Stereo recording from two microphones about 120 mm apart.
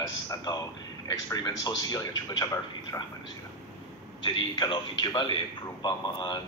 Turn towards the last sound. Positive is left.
turn(degrees=35)  # may be behind; listen again after turning